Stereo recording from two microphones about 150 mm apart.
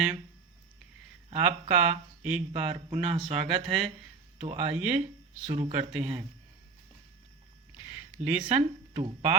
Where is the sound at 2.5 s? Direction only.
40° right (ahead or behind).